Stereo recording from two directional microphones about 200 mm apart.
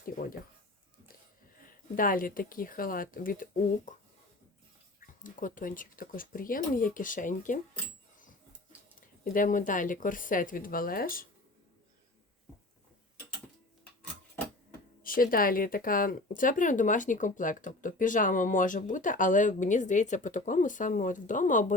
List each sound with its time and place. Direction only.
2.0 s speech: 45° left (ahead or behind)
4.9 s speech: 40° left (ahead or behind)
9.0 s speech: 45° left (ahead or behind)
15.0 s speech: 45° left (ahead or behind)